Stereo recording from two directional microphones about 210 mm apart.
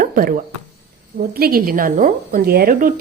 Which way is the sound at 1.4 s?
45° right (ahead or behind).